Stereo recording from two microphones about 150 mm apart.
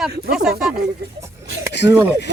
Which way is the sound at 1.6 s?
20° right (ahead or behind).